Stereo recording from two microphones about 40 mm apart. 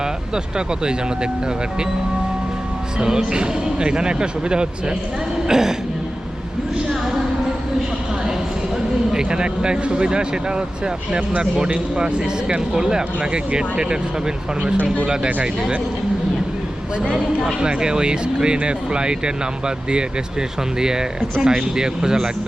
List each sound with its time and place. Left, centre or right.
0.5 s speech: right
3.0 s speech: centre
9.1 s speech: right
15.0 s speech: centre
17.0 s speech: right